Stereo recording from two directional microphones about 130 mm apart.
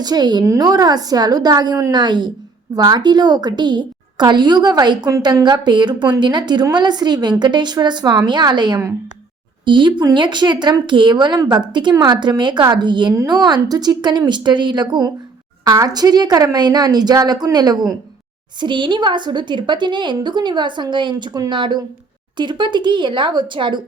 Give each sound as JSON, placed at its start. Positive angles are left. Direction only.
{"t": 0.0, "sound": "a woman's voice", "side_deg": -30}